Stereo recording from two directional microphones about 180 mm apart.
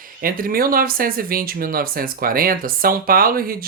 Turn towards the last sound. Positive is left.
turn(degrees=-55)  # may be behind; listen again after turning